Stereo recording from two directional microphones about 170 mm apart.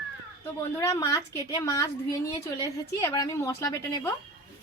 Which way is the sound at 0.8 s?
20° left (ahead or behind).